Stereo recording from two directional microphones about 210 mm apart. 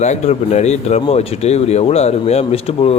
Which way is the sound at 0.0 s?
30° left (ahead or behind).